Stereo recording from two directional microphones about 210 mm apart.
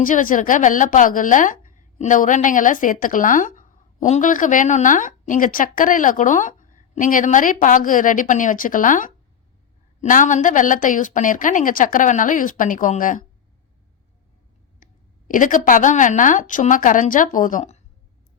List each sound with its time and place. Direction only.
0.0 s a woman's voice: 40° left (ahead or behind)
14.8 s clicking: 40° left (ahead or behind)
15.3 s a woman's voice: 40° left (ahead or behind)